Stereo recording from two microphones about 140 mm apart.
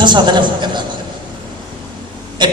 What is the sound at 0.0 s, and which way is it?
Speech, 35° right (ahead or behind).